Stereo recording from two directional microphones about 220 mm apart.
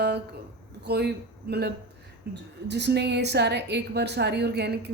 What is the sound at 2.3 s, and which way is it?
A woman's voice, 50° right (ahead or behind).